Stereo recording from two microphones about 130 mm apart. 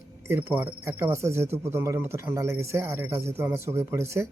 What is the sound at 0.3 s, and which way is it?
Speech, 15° right (ahead or behind).